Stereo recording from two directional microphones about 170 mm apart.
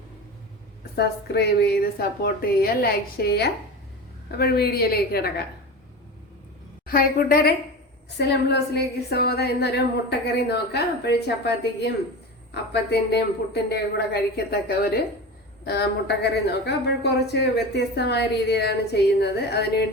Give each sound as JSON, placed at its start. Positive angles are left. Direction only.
{"t": 0.9, "sound": "a woman's voice", "side_deg": 75}
{"t": 6.8, "sound": "a woman's voice", "side_deg": 60}
{"t": 8.2, "sound": "a woman's voice", "side_deg": 80}